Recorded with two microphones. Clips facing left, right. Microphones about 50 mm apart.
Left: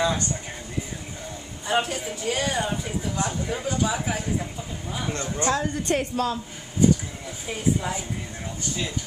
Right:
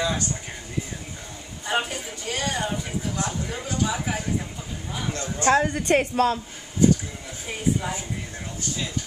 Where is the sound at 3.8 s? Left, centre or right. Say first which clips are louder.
Right 2 dB; centre.